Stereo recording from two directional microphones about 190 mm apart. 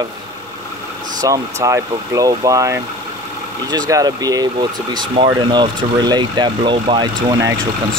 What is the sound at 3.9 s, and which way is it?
Speech, 20° right (ahead or behind).